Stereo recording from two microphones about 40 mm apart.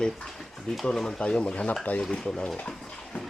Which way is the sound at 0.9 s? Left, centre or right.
Centre.